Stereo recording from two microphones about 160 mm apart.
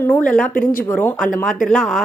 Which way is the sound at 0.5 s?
60° left (ahead or behind).